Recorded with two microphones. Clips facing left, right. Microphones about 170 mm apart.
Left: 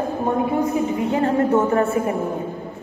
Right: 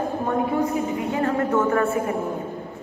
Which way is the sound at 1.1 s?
30° left (ahead or behind).